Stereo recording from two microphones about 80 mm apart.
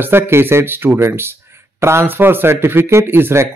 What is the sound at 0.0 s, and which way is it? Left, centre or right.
A man's voice, right.